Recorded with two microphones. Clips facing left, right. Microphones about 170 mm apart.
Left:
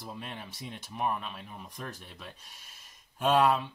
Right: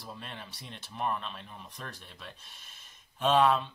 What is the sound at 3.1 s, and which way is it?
Speech, 10° left (ahead or behind).